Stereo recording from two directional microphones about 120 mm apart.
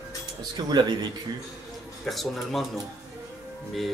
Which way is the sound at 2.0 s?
Centre (ahead or behind).